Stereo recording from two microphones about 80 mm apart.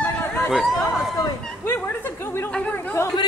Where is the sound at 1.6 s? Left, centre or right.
Left.